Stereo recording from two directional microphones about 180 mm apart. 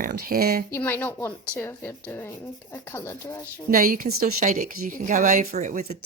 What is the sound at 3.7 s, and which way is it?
A woman's voice, 50° right (ahead or behind).